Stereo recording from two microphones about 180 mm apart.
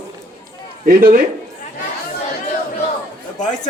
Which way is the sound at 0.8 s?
50° right (ahead or behind).